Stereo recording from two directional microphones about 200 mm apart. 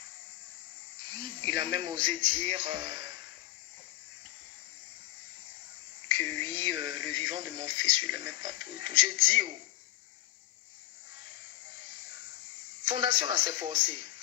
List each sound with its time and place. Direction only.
1.0 s speech: 25° right (ahead or behind)
6.4 s speech: 20° right (ahead or behind)
12.8 s speech: 25° right (ahead or behind)